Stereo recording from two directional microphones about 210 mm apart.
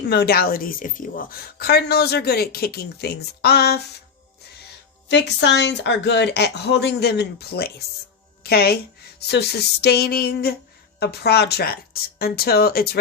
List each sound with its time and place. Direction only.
0.1 s a woman's voice: 50° left (ahead or behind)
5.0 s a woman's voice: 55° left (ahead or behind)